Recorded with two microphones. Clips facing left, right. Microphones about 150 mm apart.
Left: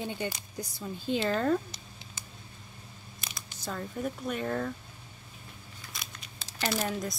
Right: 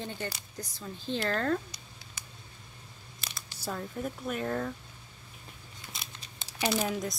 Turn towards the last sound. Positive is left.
turn(degrees=0)  # may be behind; listen again after turning